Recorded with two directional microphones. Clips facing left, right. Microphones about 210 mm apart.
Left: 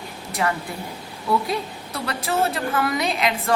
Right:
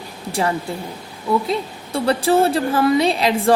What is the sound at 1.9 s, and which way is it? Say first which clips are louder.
A woman's voice: right 8 dB; 30° right (ahead or behind).